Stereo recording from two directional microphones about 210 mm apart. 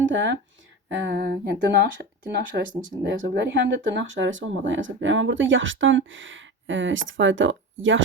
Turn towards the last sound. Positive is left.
turn(degrees=-65)  # may be behind; listen again after turning